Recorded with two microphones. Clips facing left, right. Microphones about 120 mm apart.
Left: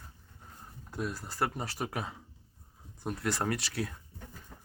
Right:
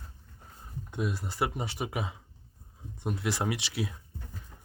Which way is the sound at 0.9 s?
Centre (ahead or behind).